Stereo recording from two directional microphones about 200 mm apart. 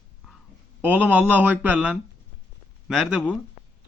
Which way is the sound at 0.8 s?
10° right (ahead or behind).